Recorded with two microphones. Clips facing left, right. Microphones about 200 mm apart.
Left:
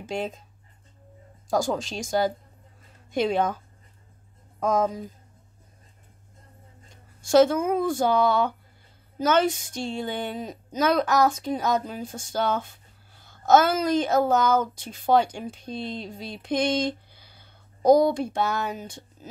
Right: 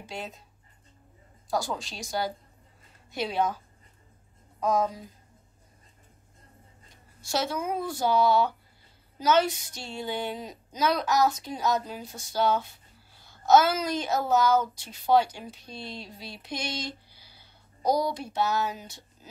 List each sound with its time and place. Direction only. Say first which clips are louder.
1.5 s speech: left 6 dB; 45° left (ahead or behind)
4.6 s speech: left 3 dB; 50° left (ahead or behind)
7.2 s speech: left 12 dB; 50° left (ahead or behind)